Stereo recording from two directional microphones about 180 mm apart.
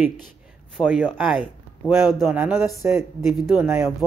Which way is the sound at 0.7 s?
5° right (ahead or behind).